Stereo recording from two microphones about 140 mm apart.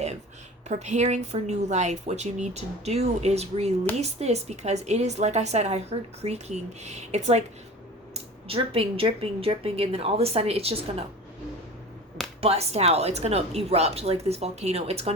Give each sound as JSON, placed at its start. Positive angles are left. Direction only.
{"t": 0.7, "sound": "a woman's voice", "side_deg": -55}
{"t": 12.4, "sound": "a woman's voice", "side_deg": -45}